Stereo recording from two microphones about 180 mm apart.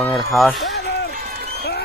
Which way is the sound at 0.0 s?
5° left (ahead or behind).